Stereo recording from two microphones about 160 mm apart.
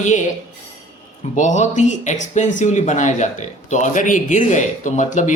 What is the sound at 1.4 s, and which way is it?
Speech, 50° left (ahead or behind).